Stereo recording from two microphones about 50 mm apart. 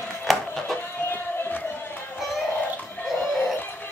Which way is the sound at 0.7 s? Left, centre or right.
Left.